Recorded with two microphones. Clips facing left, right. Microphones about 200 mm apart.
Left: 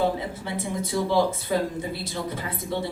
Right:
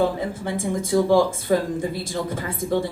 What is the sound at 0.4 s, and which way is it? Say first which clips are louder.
Speech: right 5 dB; 50° right (ahead or behind).